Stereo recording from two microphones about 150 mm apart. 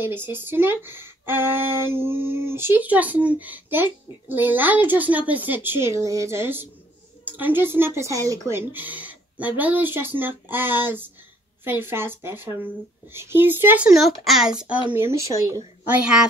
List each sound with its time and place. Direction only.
0.0 s speech: 15° right (ahead or behind)
13.9 s a child's voice: centre (ahead or behind)
14.9 s speech: 15° right (ahead or behind)